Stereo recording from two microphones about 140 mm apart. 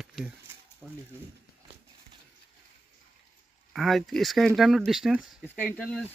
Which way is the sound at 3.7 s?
Centre (ahead or behind).